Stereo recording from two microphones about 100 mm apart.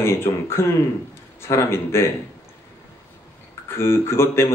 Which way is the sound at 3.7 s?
25° left (ahead or behind).